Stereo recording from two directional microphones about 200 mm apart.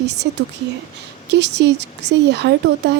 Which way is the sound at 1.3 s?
60° right (ahead or behind).